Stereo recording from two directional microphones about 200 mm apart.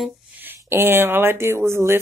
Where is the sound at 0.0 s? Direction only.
10° right (ahead or behind).